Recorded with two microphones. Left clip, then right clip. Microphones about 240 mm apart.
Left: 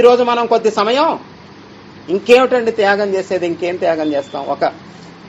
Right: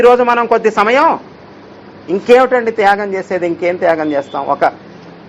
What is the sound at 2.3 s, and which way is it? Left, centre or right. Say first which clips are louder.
Speech: right 2 dB; centre.